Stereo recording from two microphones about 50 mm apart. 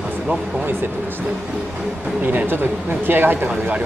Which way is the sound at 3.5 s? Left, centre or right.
Right.